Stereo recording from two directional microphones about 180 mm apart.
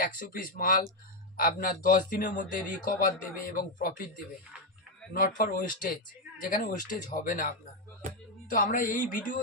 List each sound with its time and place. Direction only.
0.0 s speech: 50° left (ahead or behind)
5.1 s speech: 50° left (ahead or behind)